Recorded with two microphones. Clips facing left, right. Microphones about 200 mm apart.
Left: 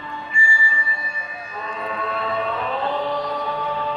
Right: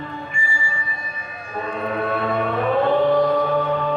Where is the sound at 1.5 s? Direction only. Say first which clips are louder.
Right 5 dB; 55° right (ahead or behind).